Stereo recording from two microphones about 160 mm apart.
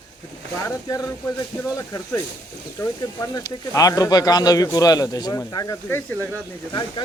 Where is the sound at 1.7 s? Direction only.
20° left (ahead or behind).